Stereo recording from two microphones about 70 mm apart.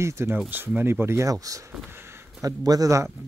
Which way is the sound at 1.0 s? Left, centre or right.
Right.